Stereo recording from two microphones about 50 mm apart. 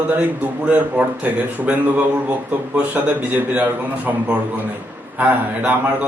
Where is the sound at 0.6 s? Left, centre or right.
Right.